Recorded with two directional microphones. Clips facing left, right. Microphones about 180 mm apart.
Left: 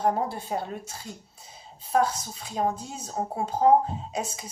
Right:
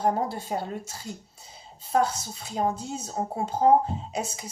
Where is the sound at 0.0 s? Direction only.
30° right (ahead or behind).